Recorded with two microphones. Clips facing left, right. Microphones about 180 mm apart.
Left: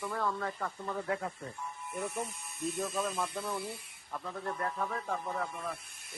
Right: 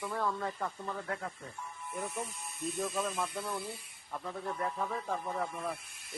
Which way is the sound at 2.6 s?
Centre (ahead or behind).